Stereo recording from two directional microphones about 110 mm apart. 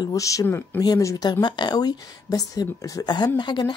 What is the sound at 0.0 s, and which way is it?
A woman's voice, 30° left (ahead or behind).